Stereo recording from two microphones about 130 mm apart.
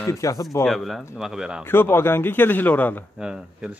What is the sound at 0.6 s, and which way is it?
Speech, centre (ahead or behind).